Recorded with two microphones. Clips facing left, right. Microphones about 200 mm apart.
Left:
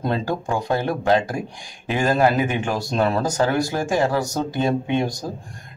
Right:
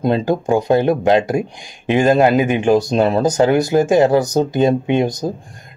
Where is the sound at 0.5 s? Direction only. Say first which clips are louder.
Right 9 dB; 20° right (ahead or behind).